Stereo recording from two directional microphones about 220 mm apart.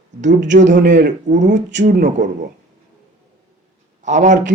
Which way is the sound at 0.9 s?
35° right (ahead or behind).